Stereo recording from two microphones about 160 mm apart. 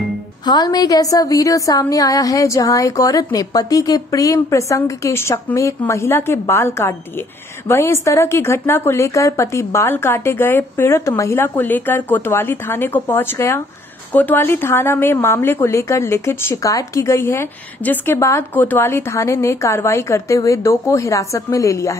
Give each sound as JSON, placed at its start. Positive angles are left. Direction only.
{"t": 0.5, "sound": "a woman's voice", "side_deg": 25}